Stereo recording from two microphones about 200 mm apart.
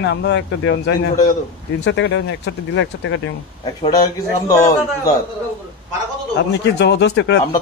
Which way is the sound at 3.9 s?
15° left (ahead or behind).